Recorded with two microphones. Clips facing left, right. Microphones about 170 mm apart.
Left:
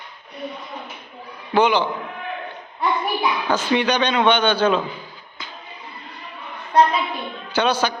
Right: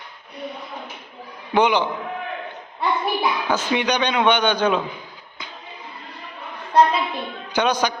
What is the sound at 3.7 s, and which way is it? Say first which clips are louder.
A man's voice: left 3 dB; 10° right (ahead or behind).